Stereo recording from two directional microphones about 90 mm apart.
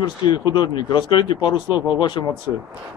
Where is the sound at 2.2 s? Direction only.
40° left (ahead or behind).